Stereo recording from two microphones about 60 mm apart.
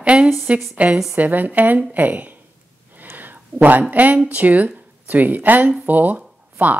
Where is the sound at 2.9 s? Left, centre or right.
Right.